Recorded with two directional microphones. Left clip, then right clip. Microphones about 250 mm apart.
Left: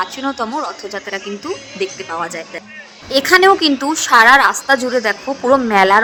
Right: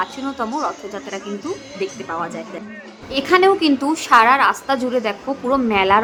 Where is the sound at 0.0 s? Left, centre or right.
Centre.